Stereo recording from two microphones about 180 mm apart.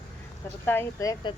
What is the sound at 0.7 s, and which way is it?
Speech, 15° left (ahead or behind).